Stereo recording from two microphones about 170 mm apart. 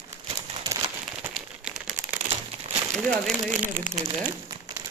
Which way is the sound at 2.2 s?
40° right (ahead or behind).